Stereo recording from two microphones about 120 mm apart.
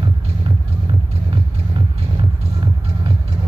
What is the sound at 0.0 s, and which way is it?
Music, 45° right (ahead or behind).